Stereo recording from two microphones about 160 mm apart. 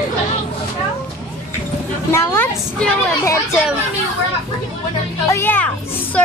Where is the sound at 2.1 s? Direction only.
15° left (ahead or behind).